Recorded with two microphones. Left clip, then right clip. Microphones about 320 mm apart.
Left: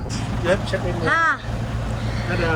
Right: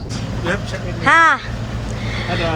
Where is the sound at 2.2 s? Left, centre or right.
Centre.